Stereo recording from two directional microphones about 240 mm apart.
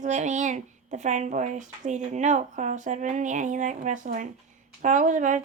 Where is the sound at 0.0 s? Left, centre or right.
Right.